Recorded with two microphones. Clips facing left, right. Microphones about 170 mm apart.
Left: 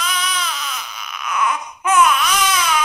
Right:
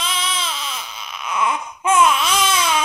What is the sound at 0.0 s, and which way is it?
Baby cry, 25° right (ahead or behind).